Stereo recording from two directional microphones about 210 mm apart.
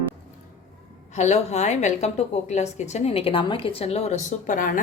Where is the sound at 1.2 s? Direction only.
30° left (ahead or behind).